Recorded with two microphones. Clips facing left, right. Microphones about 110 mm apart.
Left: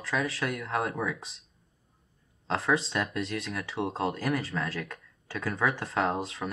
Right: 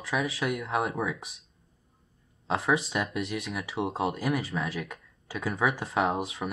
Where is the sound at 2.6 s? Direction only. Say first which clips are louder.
Even; centre (ahead or behind).